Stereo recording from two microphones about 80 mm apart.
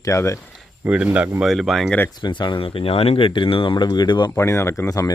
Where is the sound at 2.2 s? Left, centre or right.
Left.